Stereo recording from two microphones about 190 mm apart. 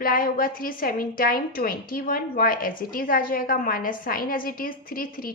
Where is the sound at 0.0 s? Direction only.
50° left (ahead or behind).